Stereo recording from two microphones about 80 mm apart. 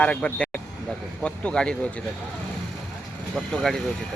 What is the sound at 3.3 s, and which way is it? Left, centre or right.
Speech, centre.